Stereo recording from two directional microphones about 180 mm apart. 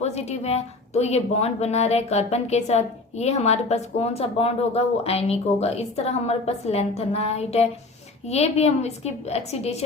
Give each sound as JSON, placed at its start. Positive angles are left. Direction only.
{"t": 0.0, "sound": "a woman's voice", "side_deg": 35}